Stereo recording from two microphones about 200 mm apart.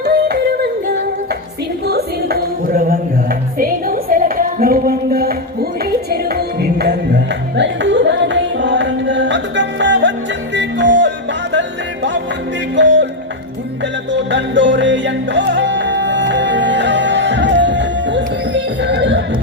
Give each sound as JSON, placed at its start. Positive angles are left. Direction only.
{"t": 0.0, "sound": "yodeling", "side_deg": -55}
{"t": 1.8, "sound": "a sound", "side_deg": -50}
{"t": 5.8, "sound": "music", "side_deg": -50}
{"t": 12.7, "sound": "music", "side_deg": -65}